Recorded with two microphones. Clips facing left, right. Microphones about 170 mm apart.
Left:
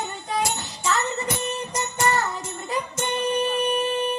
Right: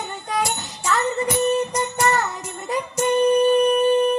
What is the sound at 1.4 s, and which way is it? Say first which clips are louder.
Music: right 8 dB; 30° right (ahead or behind).